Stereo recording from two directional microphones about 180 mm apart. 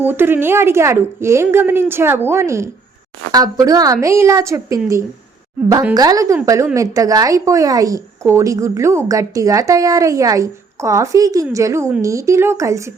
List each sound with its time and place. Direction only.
0.0 s a woman's voice: 10° right (ahead or behind)